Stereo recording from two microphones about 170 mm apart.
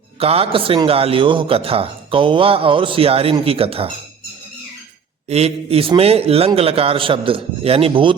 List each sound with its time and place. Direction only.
0.2 s a man's voice: 35° right (ahead or behind)
5.3 s a man's voice: 35° right (ahead or behind)